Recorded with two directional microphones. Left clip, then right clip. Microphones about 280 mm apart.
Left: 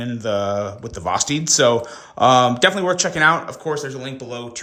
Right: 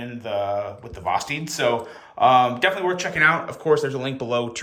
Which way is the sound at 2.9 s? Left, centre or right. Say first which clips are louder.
Left 3 dB; centre.